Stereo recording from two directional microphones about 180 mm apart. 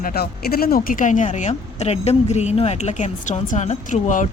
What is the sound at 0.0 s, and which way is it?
A woman's voice, 60° left (ahead or behind).